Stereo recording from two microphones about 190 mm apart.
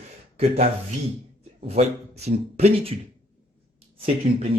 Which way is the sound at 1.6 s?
35° right (ahead or behind).